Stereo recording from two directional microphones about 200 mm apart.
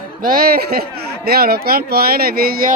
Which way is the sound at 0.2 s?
45° right (ahead or behind).